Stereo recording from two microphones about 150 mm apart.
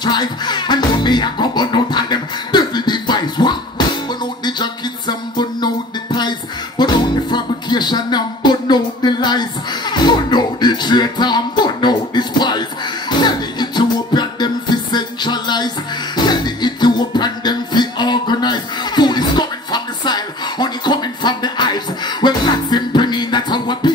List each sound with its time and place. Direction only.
0.0 s music: 30° left (ahead or behind)
6.8 s music: 30° left (ahead or behind)
16.3 s a sound: 30° left (ahead or behind)